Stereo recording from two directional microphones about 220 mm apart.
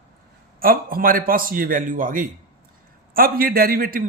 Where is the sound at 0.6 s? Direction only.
40° right (ahead or behind).